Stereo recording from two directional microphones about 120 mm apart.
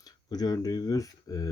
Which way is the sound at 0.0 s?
35° left (ahead or behind).